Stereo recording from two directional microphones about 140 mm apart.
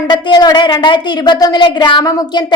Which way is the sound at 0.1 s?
30° left (ahead or behind).